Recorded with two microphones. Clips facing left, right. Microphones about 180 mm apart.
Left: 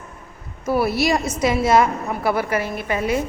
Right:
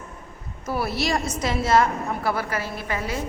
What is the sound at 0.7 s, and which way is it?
A woman's voice, 10° left (ahead or behind).